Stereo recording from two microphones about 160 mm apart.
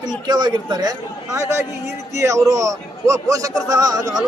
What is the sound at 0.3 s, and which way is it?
A man's voice, 25° right (ahead or behind).